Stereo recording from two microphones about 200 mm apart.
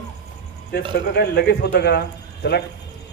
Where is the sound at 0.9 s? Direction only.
55° left (ahead or behind).